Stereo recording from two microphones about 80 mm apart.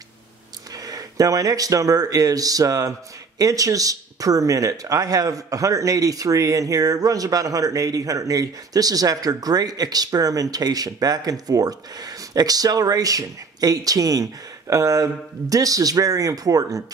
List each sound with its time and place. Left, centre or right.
0.7 s speech: right